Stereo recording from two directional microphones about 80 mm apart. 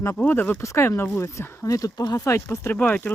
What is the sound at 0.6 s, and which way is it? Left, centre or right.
Speech, left.